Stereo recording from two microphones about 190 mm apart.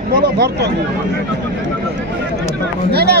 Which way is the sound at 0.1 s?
60° right (ahead or behind).